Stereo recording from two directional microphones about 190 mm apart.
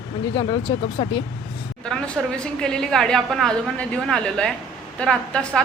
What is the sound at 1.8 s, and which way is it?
A woman's voice, 5° left (ahead or behind).